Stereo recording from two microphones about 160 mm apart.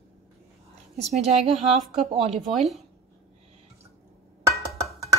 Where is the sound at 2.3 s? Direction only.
Centre (ahead or behind).